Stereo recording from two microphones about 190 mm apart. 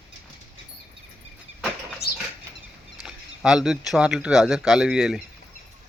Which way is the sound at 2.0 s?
60° left (ahead or behind).